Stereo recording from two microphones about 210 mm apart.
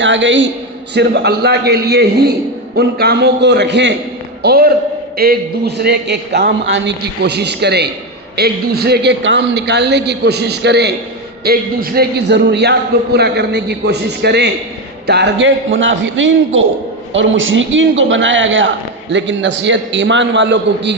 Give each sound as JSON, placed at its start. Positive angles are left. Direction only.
{"t": 0.0, "sound": "a man's voice", "side_deg": -60}